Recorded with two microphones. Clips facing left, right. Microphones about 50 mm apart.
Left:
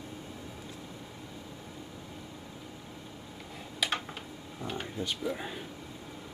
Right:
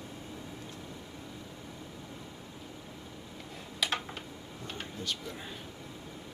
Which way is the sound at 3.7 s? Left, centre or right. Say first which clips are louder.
Left 1 dB; centre.